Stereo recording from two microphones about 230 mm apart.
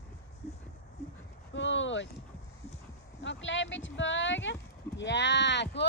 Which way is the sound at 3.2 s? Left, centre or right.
Left.